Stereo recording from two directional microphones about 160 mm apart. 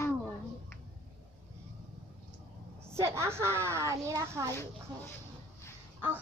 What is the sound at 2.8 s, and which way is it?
A woman's voice, 15° right (ahead or behind).